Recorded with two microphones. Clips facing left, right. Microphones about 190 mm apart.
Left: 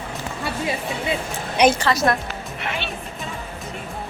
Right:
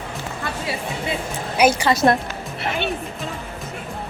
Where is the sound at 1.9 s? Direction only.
25° right (ahead or behind).